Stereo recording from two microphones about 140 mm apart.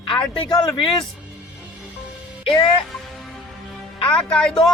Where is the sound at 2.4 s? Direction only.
40° left (ahead or behind).